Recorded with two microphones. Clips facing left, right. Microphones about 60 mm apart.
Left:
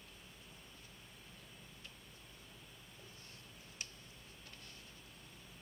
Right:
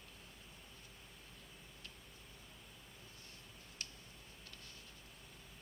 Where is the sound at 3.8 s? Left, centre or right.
Centre.